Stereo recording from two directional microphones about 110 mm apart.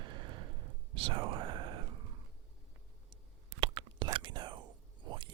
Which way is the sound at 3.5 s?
50° right (ahead or behind).